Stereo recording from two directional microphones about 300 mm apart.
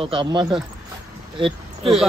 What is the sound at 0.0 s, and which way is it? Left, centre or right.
Speech, centre.